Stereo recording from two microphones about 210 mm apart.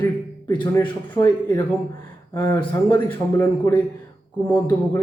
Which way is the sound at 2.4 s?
10° left (ahead or behind).